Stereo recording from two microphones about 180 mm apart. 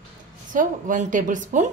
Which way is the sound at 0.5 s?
45° right (ahead or behind).